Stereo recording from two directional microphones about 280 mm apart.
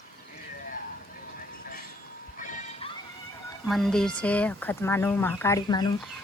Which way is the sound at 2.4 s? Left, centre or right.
Left.